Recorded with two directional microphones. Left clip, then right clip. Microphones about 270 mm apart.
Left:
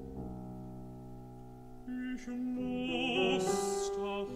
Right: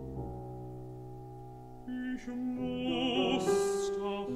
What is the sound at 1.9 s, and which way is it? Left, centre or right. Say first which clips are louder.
Music: right 2 dB; centre.